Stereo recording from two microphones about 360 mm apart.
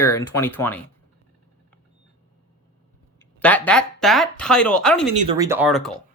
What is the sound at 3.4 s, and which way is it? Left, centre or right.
Speech, centre.